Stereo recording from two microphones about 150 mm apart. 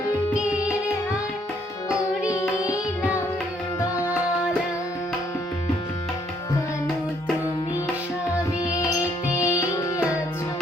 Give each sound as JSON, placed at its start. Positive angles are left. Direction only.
{"t": 2.3, "sound": "music", "side_deg": 25}
{"t": 9.4, "sound": "music", "side_deg": 20}